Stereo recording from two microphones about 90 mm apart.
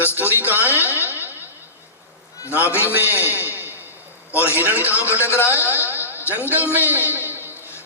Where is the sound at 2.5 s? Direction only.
20° right (ahead or behind).